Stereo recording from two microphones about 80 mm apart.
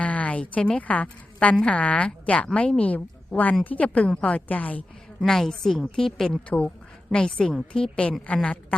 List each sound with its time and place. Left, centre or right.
0.0 s a woman's voice: centre
5.2 s a woman's voice: centre